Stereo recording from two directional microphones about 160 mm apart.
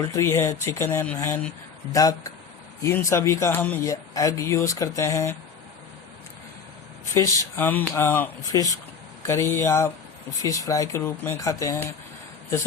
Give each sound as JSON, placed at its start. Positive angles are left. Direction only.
{"t": 0.1, "sound": "speech", "side_deg": 15}
{"t": 7.1, "sound": "speech", "side_deg": 15}